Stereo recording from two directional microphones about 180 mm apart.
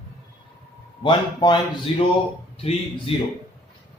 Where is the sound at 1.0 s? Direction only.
25° left (ahead or behind).